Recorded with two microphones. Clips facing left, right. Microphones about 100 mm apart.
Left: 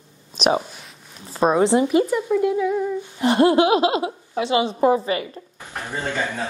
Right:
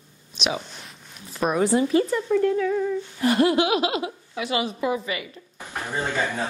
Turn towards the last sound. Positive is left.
turn(degrees=-15)  # may be behind; listen again after turning